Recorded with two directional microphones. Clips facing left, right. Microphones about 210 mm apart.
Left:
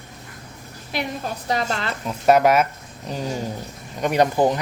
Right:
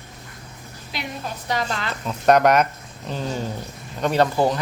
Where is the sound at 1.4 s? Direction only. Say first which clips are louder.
Left 1 dB; 30° left (ahead or behind).